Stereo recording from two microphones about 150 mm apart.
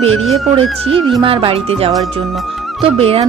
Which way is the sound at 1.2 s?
35° right (ahead or behind).